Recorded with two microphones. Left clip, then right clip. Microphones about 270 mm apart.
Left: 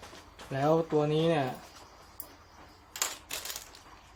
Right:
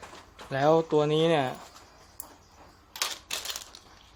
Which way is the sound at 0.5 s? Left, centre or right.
Right.